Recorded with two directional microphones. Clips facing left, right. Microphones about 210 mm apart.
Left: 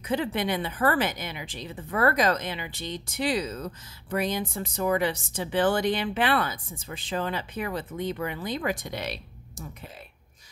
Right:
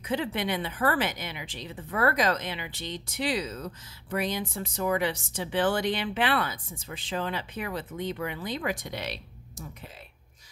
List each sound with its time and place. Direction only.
0.0 s speech: 45° left (ahead or behind)